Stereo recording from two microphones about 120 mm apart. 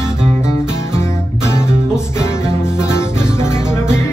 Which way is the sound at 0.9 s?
20° left (ahead or behind).